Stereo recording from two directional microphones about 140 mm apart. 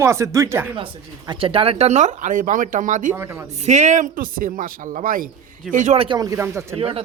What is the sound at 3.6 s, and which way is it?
Speech, 55° right (ahead or behind).